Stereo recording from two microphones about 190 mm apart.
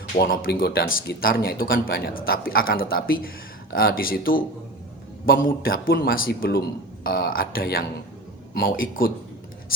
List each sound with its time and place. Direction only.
0.1 s speech: 50° left (ahead or behind)